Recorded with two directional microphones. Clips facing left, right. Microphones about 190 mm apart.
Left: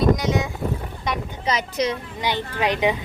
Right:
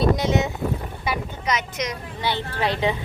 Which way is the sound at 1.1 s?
5° right (ahead or behind).